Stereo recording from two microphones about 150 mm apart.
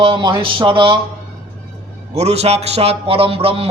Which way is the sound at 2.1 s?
45° right (ahead or behind).